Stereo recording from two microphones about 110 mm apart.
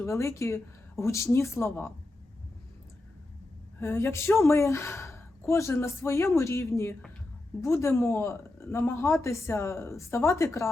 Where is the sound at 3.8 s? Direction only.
20° left (ahead or behind).